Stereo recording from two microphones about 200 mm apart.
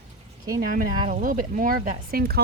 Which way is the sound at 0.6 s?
45° right (ahead or behind).